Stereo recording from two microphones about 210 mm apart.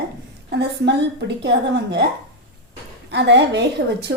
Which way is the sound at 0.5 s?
50° right (ahead or behind).